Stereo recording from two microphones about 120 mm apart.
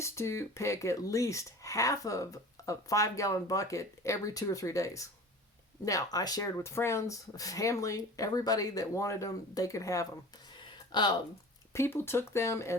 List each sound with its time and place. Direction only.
0.0 s speech: 25° left (ahead or behind)
10.6 s a sound: 40° left (ahead or behind)
11.7 s speech: 20° left (ahead or behind)